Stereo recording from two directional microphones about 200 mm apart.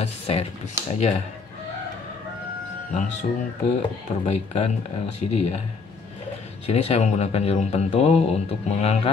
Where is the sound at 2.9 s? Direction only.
40° left (ahead or behind).